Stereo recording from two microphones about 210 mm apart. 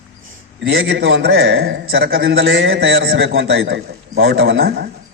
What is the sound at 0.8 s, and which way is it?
A man's voice, 50° right (ahead or behind).